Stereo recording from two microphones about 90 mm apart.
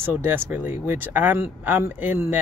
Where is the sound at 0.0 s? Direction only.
20° right (ahead or behind).